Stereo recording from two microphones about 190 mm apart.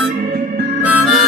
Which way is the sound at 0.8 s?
5° right (ahead or behind).